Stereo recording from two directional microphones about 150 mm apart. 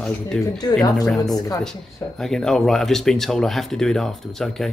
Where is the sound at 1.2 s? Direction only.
25° left (ahead or behind).